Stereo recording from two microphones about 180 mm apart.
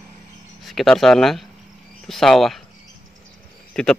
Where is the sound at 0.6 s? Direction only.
Centre (ahead or behind).